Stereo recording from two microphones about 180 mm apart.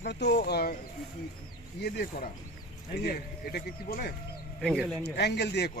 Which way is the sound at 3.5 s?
60° left (ahead or behind).